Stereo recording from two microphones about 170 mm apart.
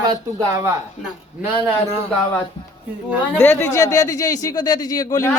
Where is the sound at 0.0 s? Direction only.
20° right (ahead or behind).